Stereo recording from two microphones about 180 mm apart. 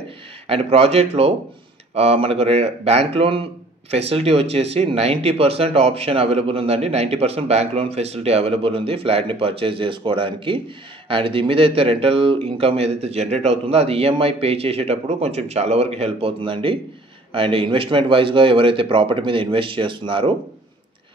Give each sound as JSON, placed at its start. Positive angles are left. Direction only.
{"t": 0.5, "sound": "speech", "side_deg": -35}